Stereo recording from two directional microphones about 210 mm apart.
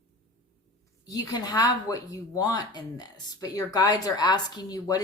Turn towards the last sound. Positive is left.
turn(degrees=15)  # may be behind; listen again after turning